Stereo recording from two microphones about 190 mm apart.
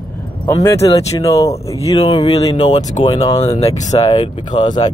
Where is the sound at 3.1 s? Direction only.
20° left (ahead or behind).